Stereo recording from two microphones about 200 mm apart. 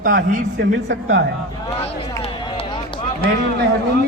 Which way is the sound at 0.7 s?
65° right (ahead or behind).